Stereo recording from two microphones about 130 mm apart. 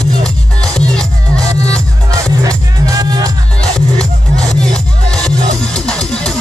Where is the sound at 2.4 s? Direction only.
30° right (ahead or behind).